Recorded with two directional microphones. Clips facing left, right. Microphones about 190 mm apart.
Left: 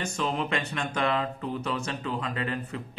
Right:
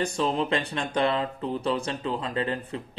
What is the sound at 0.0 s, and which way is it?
Speech, 35° right (ahead or behind).